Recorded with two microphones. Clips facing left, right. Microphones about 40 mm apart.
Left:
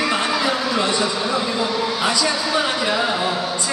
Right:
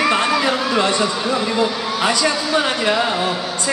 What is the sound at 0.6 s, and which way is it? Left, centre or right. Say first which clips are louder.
A man's voice: right 2 dB; right.